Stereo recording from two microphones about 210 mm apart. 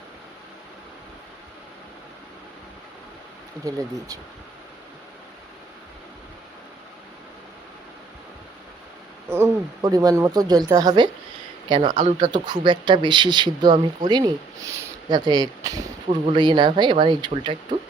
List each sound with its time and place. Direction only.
3.6 s speech: 15° right (ahead or behind)
9.3 s speech: 15° right (ahead or behind)
11.9 s speech: 35° right (ahead or behind)
12.3 s speech: 20° right (ahead or behind)